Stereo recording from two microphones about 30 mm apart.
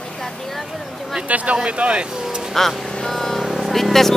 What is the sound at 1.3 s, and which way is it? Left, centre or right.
Speech, right.